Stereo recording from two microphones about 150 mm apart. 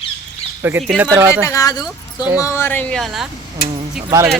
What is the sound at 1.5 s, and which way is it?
Speech, 25° left (ahead or behind).